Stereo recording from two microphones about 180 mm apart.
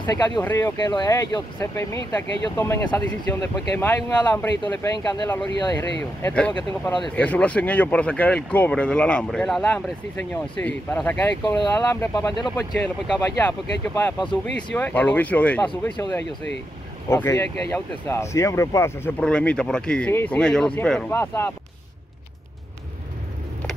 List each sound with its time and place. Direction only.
0.0 s speech: 15° left (ahead or behind)
4.9 s speech: 20° left (ahead or behind)
12.4 s speech: 25° left (ahead or behind)
12.8 s speech: 10° left (ahead or behind)